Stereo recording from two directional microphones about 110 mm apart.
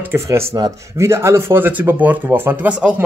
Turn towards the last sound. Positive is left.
turn(degrees=-10)  # may be behind; listen again after turning